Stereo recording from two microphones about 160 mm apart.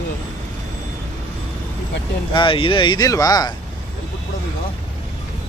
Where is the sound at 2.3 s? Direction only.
30° left (ahead or behind).